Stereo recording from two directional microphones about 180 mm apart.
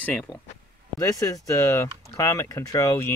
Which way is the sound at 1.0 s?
20° left (ahead or behind).